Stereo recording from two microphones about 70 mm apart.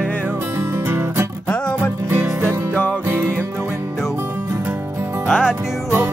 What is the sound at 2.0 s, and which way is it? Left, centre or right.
Music, right.